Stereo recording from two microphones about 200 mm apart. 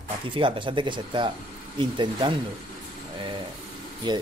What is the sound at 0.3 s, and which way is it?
Speech, 25° right (ahead or behind).